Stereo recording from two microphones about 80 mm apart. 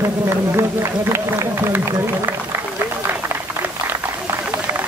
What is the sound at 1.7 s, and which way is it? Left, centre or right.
Speech, right.